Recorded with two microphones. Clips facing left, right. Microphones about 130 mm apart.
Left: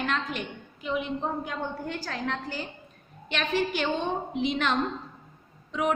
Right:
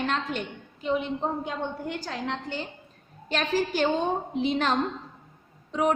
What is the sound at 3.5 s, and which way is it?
A woman's voice, 35° right (ahead or behind).